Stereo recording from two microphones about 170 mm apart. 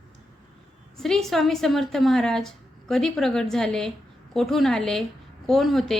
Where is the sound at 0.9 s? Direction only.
5° left (ahead or behind).